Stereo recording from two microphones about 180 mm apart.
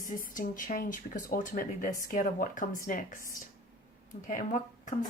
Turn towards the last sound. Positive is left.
turn(degrees=45)  # may be behind; listen again after turning